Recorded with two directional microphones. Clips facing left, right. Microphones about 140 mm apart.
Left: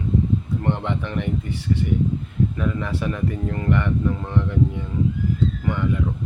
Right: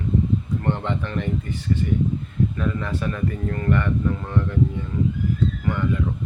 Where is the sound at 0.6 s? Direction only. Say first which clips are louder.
Left 1 dB; 15° left (ahead or behind).